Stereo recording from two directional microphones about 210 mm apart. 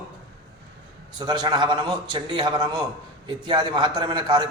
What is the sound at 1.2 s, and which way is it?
A man's voice, 20° right (ahead or behind).